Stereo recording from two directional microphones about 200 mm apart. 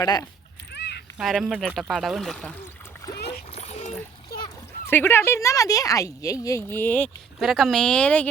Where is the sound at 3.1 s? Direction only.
55° left (ahead or behind).